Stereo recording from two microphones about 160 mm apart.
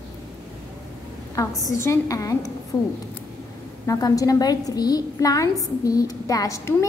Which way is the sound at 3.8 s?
20° left (ahead or behind).